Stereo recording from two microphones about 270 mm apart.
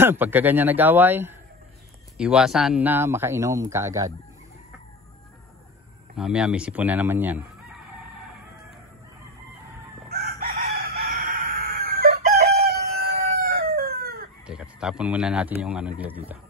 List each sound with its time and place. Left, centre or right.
0.0 s speech: centre
6.1 s speech: centre
10.1 s chicken: right
14.4 s speech: centre